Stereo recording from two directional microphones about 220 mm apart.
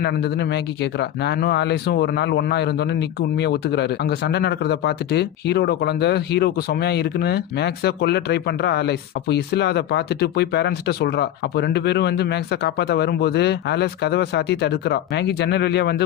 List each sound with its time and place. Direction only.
0.0 s speech: 50° left (ahead or behind)